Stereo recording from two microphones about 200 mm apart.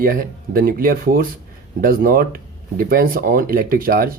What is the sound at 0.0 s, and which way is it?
Speech, 45° right (ahead or behind).